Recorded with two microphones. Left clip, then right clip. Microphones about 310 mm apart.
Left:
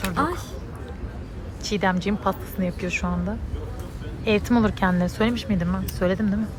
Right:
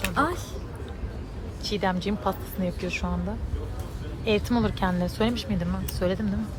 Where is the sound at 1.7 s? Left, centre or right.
Centre.